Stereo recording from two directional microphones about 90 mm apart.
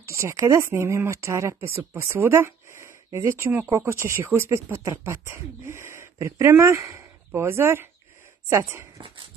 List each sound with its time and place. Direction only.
0.0 s speech: 30° right (ahead or behind)